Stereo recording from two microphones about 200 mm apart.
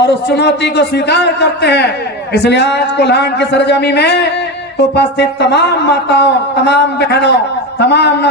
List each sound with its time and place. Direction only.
0.0 s speech: 60° left (ahead or behind)